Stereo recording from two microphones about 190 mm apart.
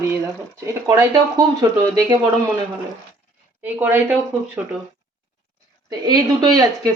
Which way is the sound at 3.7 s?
10° right (ahead or behind).